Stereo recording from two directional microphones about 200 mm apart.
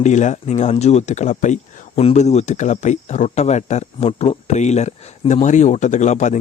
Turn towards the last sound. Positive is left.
turn(degrees=35)  # may be behind; listen again after turning